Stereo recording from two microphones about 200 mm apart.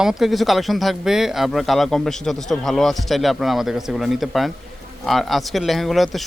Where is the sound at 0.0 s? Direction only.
Centre (ahead or behind).